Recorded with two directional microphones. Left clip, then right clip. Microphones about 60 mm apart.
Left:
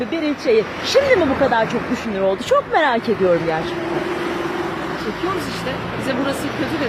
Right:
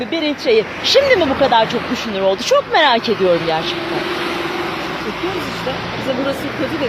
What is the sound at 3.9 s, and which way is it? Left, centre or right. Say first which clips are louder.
Vehicle: right 2 dB; centre.